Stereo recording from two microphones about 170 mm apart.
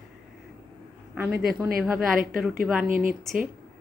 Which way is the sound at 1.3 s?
65° right (ahead or behind).